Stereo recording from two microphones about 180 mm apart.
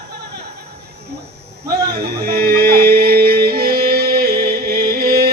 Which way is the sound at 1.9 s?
60° right (ahead or behind).